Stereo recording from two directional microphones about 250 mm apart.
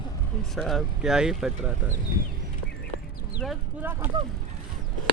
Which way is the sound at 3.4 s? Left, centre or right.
Centre.